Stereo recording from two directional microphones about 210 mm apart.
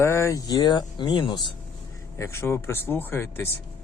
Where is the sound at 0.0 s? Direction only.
15° left (ahead or behind).